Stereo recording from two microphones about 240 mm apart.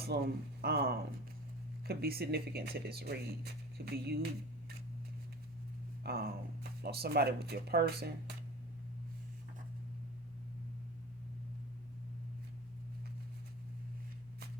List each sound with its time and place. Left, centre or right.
0.1 s speech: right
6.0 s speech: right